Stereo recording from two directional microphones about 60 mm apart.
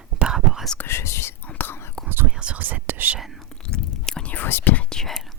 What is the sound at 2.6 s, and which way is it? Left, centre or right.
Whispering, right.